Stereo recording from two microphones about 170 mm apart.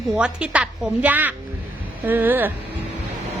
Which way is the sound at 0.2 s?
5° right (ahead or behind).